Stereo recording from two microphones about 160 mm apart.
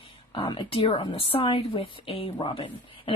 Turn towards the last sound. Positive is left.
turn(degrees=30)  # may be behind; listen again after turning